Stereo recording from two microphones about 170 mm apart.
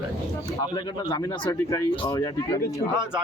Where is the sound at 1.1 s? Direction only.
20° left (ahead or behind).